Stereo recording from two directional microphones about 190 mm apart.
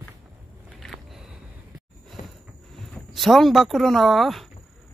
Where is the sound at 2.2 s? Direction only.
40° left (ahead or behind).